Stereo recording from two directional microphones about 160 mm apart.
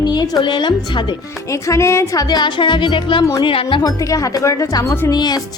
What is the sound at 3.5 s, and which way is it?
A woman's voice, 35° left (ahead or behind).